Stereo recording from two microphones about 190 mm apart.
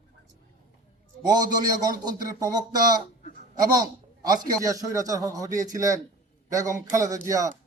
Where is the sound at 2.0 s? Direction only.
20° right (ahead or behind).